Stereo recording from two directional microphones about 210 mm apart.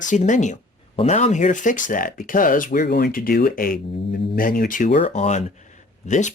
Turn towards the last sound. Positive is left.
turn(degrees=35)  # may be behind; listen again after turning